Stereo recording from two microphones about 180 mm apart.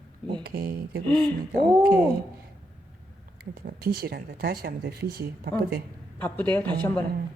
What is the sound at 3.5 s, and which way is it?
Speech, 55° right (ahead or behind).